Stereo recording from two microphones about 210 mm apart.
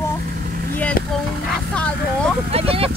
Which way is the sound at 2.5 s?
25° right (ahead or behind).